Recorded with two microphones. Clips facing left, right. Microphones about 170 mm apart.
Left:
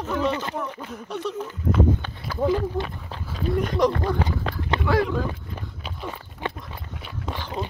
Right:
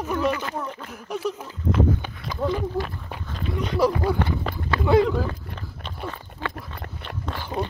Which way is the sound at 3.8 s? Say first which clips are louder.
Right 2 dB; 5° right (ahead or behind).